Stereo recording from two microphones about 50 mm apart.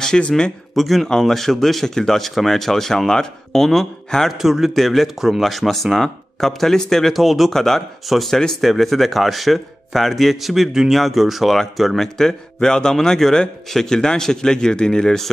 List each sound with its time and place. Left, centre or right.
0.1 s speech: centre
4.4 s a man's voice: centre